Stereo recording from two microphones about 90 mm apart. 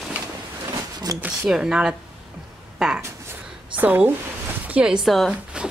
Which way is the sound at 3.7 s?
15° right (ahead or behind).